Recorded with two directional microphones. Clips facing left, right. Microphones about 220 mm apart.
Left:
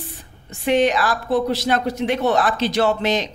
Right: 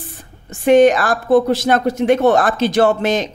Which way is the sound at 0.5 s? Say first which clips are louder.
Right 7 dB; 50° right (ahead or behind).